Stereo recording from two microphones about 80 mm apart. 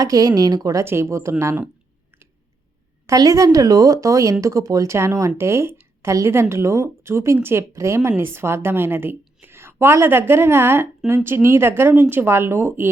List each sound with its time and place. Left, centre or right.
0.0 s speech: right
0.9 s speech: right
3.1 s a woman's voice: right